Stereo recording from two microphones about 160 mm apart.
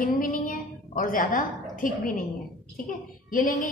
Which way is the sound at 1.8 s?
60° left (ahead or behind).